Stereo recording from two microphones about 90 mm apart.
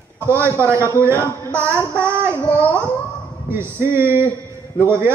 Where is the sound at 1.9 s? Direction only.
30° right (ahead or behind).